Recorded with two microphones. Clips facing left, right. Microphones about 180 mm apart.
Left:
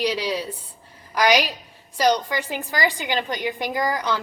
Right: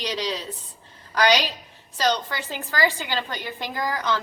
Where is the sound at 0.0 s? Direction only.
10° left (ahead or behind).